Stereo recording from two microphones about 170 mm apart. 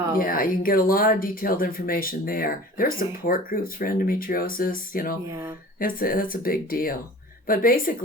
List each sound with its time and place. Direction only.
0.2 s speech: 55° left (ahead or behind)